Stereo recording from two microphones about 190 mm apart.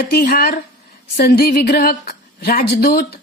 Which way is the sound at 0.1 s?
50° left (ahead or behind).